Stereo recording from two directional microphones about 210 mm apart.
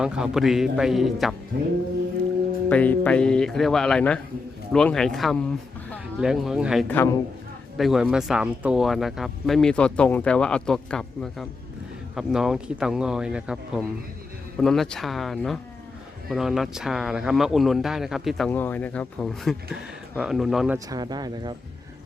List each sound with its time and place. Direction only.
0.0 s speech: 5° right (ahead or behind)
2.6 s speech: 5° left (ahead or behind)
6.8 s a man's voice: 10° left (ahead or behind)
7.8 s speech: centre (ahead or behind)
20.7 s speech: 20° right (ahead or behind)